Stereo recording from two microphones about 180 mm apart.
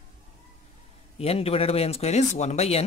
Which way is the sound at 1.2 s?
35° left (ahead or behind).